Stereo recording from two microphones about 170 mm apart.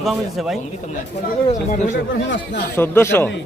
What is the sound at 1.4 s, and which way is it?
Speech, 45° left (ahead or behind).